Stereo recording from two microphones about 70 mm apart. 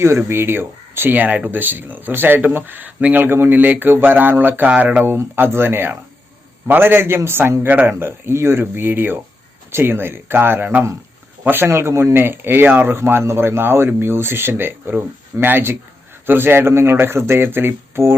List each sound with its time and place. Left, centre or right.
0.2 s speech: right
5.0 s speech: right